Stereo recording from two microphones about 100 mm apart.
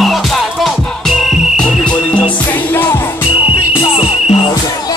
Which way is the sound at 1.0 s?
Centre (ahead or behind).